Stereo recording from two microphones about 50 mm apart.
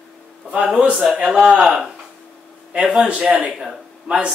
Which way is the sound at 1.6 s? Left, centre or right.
Centre.